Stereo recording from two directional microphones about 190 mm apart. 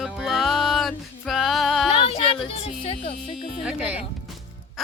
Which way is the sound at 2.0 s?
30° left (ahead or behind).